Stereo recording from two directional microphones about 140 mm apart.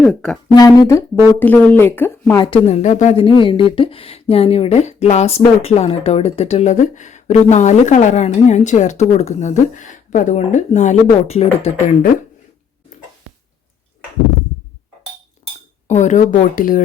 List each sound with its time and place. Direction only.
0.0 s speech: 5° left (ahead or behind)
0.5 s speech: 25° left (ahead or behind)
1.4 s speech: 10° left (ahead or behind)
2.3 s speech: 35° left (ahead or behind)
2.6 s speech: 55° left (ahead or behind)
15.9 s speech: 60° left (ahead or behind)